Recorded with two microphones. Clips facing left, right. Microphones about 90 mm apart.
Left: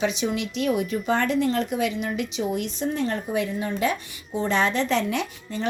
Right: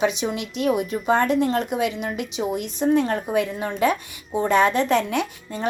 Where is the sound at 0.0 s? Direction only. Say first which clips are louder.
Right 3 dB; 55° right (ahead or behind).